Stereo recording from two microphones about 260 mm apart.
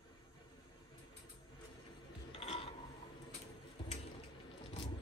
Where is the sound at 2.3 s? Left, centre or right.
Left.